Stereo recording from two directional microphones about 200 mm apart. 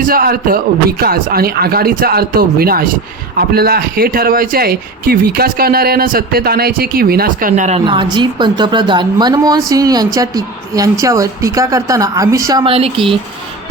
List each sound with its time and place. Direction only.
0.0 s a man's voice: 45° right (ahead or behind)
8.1 s a woman's voice: 20° right (ahead or behind)